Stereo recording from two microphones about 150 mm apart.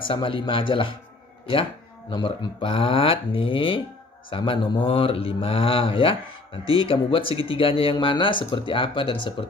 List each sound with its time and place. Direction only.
0.1 s speech: 35° left (ahead or behind)